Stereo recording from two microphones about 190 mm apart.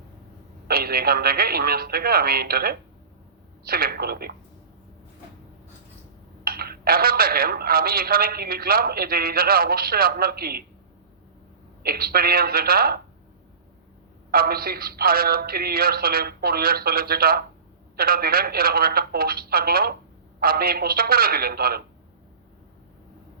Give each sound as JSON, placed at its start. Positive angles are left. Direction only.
{"t": 0.7, "sound": "speech", "side_deg": -50}
{"t": 6.4, "sound": "speech", "side_deg": -50}
{"t": 11.8, "sound": "speech", "side_deg": -55}
{"t": 14.3, "sound": "speech", "side_deg": -50}